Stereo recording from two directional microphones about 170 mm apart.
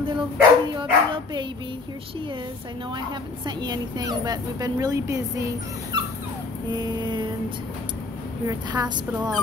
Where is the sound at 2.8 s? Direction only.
25° right (ahead or behind).